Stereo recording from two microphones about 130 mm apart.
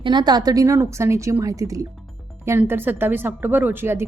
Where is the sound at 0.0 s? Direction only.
35° right (ahead or behind).